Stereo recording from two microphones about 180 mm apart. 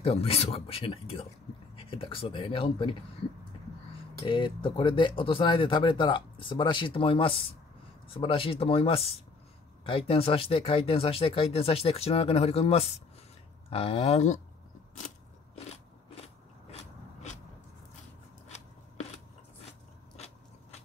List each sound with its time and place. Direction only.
0.0 s speech: 35° left (ahead or behind)
4.2 s speech: 30° left (ahead or behind)